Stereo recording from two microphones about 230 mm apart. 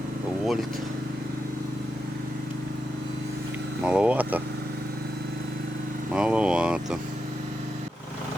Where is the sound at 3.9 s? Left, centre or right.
Centre.